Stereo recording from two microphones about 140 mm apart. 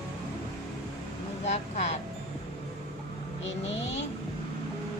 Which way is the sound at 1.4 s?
55° left (ahead or behind).